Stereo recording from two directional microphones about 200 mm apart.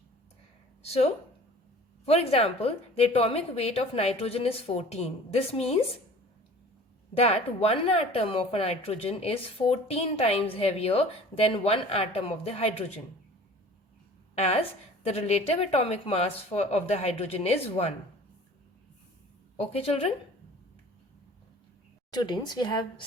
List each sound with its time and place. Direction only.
0.8 s speech: 30° left (ahead or behind)
7.1 s speech: 30° left (ahead or behind)
14.3 s a woman's voice: 30° left (ahead or behind)
19.5 s a woman's voice: 30° left (ahead or behind)
22.1 s speech: 20° left (ahead or behind)